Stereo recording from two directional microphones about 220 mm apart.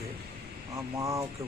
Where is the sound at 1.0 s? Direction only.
15° right (ahead or behind).